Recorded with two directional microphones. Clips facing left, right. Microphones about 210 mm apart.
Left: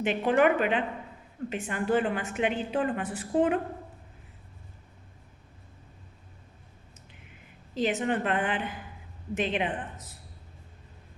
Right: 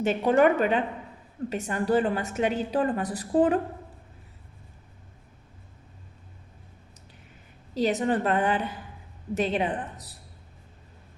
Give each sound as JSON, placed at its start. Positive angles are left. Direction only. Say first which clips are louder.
{"t": 0.0, "sound": "a woman's voice", "louder": "right 3 dB", "side_deg": -40}
{"t": 7.7, "sound": "a woman's voice", "louder": "right 3 dB", "side_deg": -40}